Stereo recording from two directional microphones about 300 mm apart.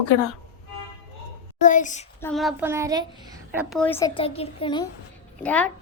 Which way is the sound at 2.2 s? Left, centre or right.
Centre.